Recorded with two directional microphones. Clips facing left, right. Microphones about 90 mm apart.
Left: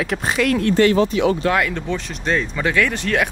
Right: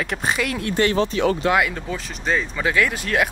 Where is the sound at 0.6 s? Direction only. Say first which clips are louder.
Left 5 dB; 20° right (ahead or behind).